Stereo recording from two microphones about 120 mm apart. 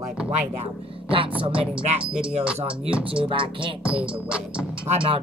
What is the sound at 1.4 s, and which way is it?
Music, 45° right (ahead or behind).